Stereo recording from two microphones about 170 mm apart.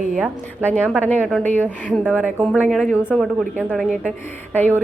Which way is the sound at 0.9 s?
10° left (ahead or behind).